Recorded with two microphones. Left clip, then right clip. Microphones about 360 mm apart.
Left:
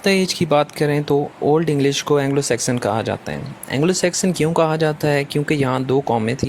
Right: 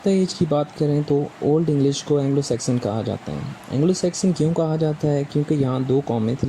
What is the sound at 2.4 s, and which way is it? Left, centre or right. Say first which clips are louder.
Speech: left 4 dB; left.